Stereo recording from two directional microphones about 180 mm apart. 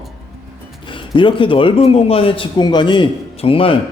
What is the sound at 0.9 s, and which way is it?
A man's voice, 25° left (ahead or behind).